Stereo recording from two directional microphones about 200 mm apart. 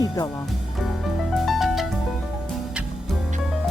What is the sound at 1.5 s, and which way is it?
Music, centre (ahead or behind).